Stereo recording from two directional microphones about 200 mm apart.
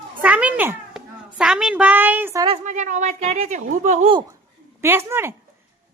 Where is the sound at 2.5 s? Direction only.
35° right (ahead or behind).